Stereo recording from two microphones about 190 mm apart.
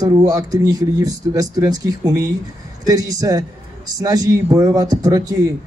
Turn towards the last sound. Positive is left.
turn(degrees=-20)  # may be behind; listen again after turning